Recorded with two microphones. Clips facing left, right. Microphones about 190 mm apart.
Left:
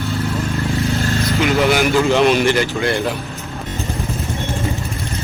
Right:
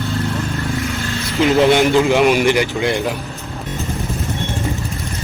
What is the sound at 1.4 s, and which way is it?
Speech, 30° right (ahead or behind).